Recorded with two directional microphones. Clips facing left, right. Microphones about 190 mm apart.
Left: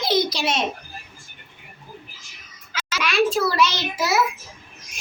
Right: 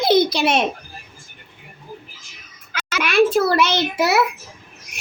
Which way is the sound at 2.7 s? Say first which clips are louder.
Right 5 dB; 55° right (ahead or behind).